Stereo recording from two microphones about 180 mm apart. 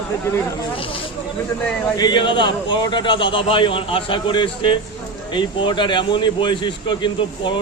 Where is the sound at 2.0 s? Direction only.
25° left (ahead or behind).